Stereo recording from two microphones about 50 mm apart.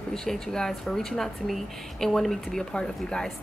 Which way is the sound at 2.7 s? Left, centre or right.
Centre.